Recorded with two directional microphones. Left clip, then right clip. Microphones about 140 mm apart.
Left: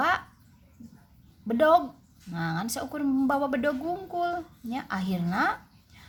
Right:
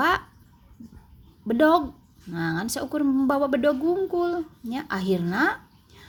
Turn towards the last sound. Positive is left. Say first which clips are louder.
# right 2 dB
turn(degrees=-25)  # may be behind; listen again after turning